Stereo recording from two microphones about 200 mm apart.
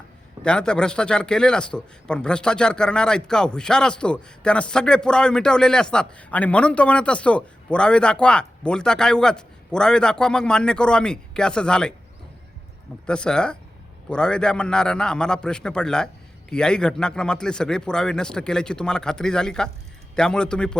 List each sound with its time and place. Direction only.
0.4 s a man's voice: 5° left (ahead or behind)
13.1 s a man's voice: 5° left (ahead or behind)